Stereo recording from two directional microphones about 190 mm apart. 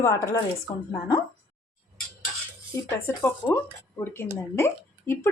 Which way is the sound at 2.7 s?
10° left (ahead or behind).